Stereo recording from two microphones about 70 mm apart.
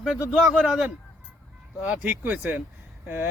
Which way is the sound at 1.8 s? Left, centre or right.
Right.